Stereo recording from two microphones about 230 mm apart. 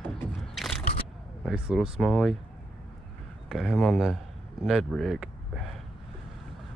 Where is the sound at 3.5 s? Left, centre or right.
Centre.